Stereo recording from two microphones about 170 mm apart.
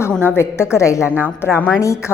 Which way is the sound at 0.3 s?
15° left (ahead or behind).